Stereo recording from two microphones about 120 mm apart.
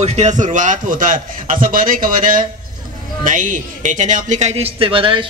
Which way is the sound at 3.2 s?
90° right.